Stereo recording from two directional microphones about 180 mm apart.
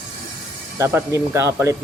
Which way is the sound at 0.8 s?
15° right (ahead or behind).